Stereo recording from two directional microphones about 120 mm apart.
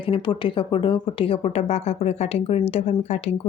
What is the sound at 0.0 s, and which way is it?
A woman's voice, 45° left (ahead or behind).